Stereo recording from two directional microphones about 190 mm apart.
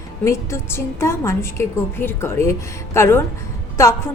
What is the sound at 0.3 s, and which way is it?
A woman's voice, 15° left (ahead or behind).